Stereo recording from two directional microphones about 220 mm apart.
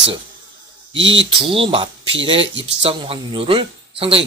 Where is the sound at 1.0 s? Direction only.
25° right (ahead or behind).